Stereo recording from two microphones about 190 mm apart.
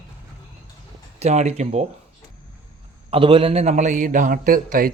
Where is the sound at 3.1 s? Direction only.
30° right (ahead or behind); by 4.9 s 45° right (ahead or behind).